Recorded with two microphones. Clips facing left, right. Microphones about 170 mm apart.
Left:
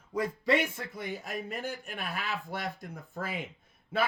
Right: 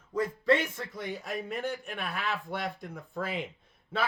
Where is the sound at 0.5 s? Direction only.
10° left (ahead or behind).